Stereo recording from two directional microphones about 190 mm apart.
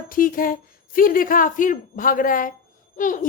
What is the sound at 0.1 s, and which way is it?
A woman's voice, 45° left (ahead or behind).